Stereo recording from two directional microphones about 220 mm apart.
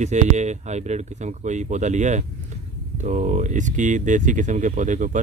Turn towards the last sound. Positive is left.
turn(degrees=-35)  # may be behind; listen again after turning